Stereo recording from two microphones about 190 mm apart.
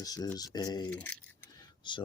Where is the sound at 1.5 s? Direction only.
25° left (ahead or behind).